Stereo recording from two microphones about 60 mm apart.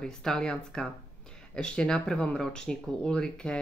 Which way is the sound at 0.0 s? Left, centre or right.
Centre.